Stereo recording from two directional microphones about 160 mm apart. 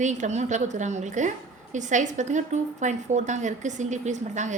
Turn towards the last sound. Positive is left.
turn(degrees=-50)  # may be behind; listen again after turning